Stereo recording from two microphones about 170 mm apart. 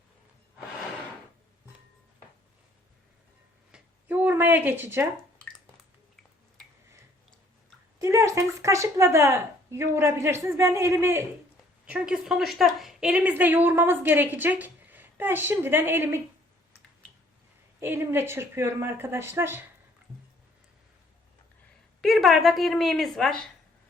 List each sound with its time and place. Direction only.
3.7 s a sound: 10° right (ahead or behind)
7.9 s a woman's voice: 20° right (ahead or behind)
11.9 s a woman's voice: 5° right (ahead or behind)
17.7 s a woman's voice: 15° right (ahead or behind)
22.0 s a woman's voice: centre (ahead or behind)